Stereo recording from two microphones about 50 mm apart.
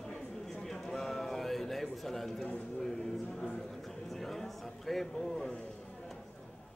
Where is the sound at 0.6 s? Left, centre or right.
Centre.